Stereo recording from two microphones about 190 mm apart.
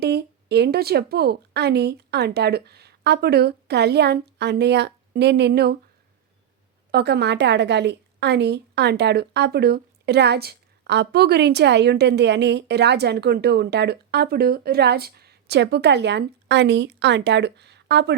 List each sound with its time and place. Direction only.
0.0 s a woman's voice: 60° right (ahead or behind)
6.9 s a woman's voice: 60° right (ahead or behind)